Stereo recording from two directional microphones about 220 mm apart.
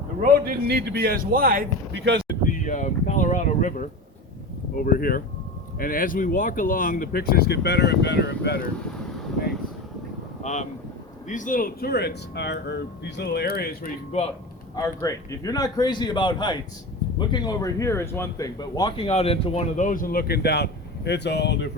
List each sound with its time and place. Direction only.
0.2 s speech: 40° right (ahead or behind)
2.4 s speech: 35° left (ahead or behind)
10.4 s vehicle: 30° left (ahead or behind)
11.3 s speech: 35° left (ahead or behind)
14.8 s speech: 15° left (ahead or behind); by 21.7 s 50° left (ahead or behind)